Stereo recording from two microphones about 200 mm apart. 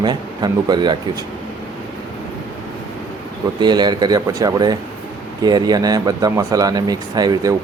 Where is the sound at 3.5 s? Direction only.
20° right (ahead or behind).